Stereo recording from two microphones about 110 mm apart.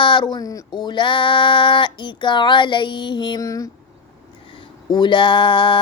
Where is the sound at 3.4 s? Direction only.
30° left (ahead or behind).